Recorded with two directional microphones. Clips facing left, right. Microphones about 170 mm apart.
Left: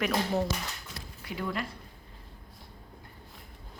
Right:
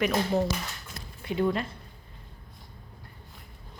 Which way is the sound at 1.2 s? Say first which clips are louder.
Right 7 dB; 25° right (ahead or behind).